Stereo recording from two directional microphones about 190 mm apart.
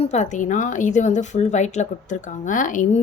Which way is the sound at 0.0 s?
35° left (ahead or behind).